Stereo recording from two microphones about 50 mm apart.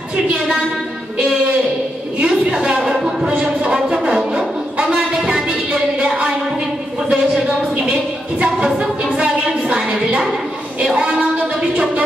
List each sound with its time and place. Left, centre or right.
0.1 s music: right
2.2 s music: centre
7.1 s a sound: centre
7.7 s a woman's voice: right
8.5 s music: right